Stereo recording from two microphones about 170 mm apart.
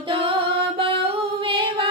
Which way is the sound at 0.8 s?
30° right (ahead or behind).